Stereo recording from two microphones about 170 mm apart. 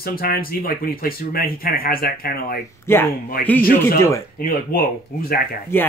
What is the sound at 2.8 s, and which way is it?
Speech, 15° left (ahead or behind).